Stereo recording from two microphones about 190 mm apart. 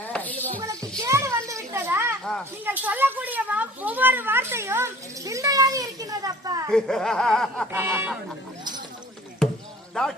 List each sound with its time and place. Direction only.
0.0 s music: 10° left (ahead or behind)
0.7 s a sound: 15° right (ahead or behind)
2.4 s speech: 10° right (ahead or behind)
6.7 s speech: 5° left (ahead or behind)
7.7 s speech: 10° right (ahead or behind)
9.4 s basketball bounce: 5° left (ahead or behind)
9.9 s a man's voice: 5° left (ahead or behind)